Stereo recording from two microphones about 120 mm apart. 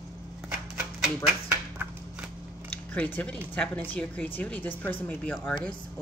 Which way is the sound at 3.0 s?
10° left (ahead or behind).